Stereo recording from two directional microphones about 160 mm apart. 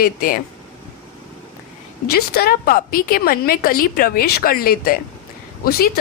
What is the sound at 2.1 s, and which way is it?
A woman's voice, 75° left (ahead or behind).